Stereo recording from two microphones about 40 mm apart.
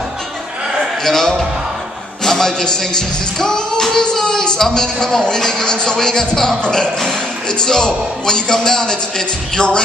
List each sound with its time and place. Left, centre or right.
1.0 s music: centre